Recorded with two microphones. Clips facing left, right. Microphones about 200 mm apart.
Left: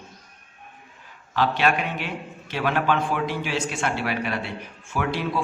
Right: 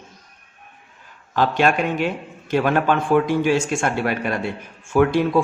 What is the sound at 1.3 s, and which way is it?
A man's voice, 45° right (ahead or behind).